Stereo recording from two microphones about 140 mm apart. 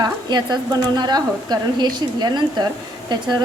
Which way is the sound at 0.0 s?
30° right (ahead or behind).